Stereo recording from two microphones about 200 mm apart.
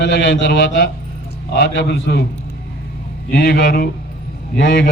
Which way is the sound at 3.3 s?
55° left (ahead or behind).